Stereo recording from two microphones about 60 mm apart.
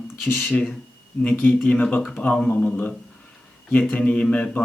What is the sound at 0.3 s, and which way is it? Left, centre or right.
Speech, left.